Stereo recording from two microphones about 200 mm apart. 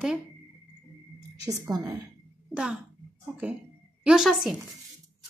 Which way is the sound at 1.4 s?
15° right (ahead or behind).